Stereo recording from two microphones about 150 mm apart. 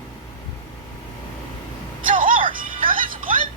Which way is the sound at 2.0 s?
65° right (ahead or behind).